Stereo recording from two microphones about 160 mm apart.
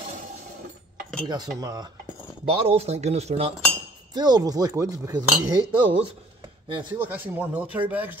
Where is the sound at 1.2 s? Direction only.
25° right (ahead or behind).